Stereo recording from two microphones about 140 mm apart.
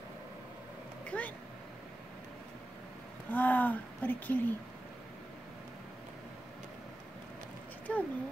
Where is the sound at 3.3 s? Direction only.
10° left (ahead or behind).